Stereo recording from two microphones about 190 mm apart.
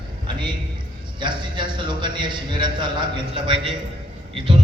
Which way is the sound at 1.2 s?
25° right (ahead or behind).